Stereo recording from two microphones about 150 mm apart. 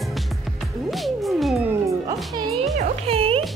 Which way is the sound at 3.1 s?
40° right (ahead or behind).